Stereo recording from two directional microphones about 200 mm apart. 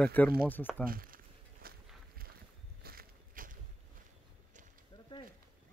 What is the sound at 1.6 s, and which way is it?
Walk, 50° right (ahead or behind).